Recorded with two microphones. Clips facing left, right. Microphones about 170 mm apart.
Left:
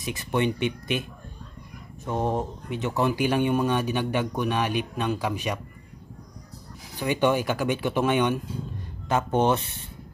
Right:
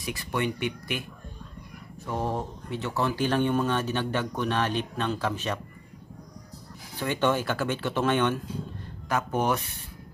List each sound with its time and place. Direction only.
0.0 s speech: 20° left (ahead or behind)
2.0 s speech: 20° left (ahead or behind)
7.0 s speech: 15° left (ahead or behind)
9.1 s speech: 25° left (ahead or behind)